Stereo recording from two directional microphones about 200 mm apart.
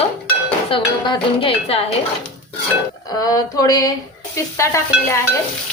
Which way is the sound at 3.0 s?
20° left (ahead or behind).